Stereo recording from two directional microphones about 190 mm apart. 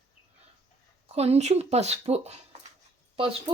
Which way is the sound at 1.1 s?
35° right (ahead or behind).